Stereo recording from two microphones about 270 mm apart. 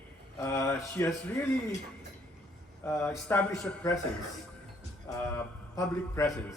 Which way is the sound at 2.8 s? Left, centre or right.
Centre.